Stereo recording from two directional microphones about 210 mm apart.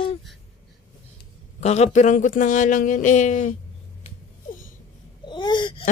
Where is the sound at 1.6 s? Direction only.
30° left (ahead or behind).